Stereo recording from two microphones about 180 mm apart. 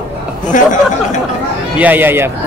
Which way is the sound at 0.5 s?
45° left (ahead or behind).